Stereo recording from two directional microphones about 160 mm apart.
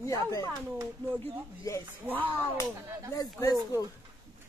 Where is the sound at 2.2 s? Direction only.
10° left (ahead or behind).